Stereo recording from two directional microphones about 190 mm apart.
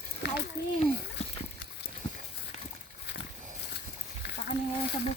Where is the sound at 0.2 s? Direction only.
65° left (ahead or behind).